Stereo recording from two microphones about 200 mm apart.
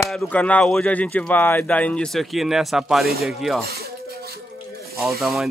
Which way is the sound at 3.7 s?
50° right (ahead or behind).